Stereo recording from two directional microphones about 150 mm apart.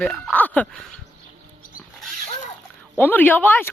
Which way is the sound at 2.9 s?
10° left (ahead or behind).